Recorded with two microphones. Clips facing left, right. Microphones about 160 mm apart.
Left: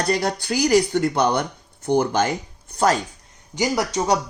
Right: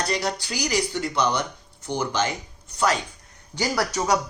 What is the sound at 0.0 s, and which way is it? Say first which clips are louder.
Speech: left 4 dB; 50° left (ahead or behind).